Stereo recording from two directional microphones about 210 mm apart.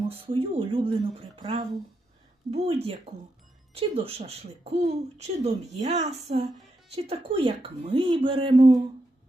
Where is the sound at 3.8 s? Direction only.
25° right (ahead or behind).